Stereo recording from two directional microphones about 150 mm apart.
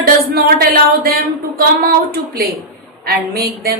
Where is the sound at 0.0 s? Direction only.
90° right.